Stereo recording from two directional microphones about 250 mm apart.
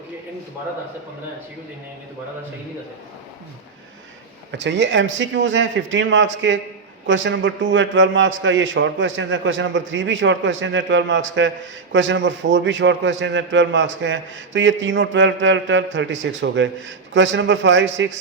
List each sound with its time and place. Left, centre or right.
4.5 s a man's voice: right